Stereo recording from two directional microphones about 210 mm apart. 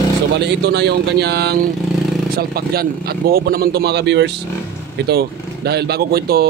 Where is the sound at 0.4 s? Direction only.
55° right (ahead or behind).